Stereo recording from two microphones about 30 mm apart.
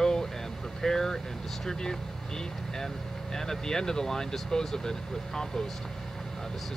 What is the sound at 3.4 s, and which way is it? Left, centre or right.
Speech, centre.